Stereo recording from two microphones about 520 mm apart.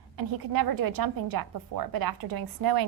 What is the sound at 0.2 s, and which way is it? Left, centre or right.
A woman's voice, right.